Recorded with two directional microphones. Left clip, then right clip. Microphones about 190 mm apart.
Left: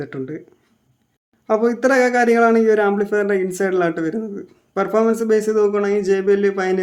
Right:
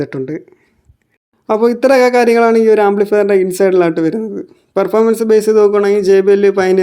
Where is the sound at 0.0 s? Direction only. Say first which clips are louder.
Right 8 dB; 35° right (ahead or behind).